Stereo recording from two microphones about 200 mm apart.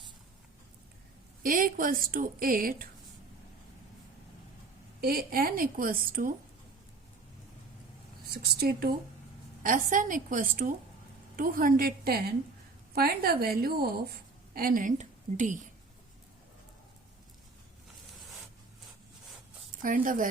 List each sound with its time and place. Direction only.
1.4 s a woman's voice: 45° right (ahead or behind)
4.9 s a woman's voice: 50° right (ahead or behind)
8.3 s a woman's voice: 50° right (ahead or behind)
19.8 s a woman's voice: 40° right (ahead or behind)